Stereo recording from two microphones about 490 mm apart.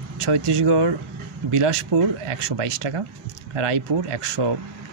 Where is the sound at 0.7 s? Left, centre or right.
Right.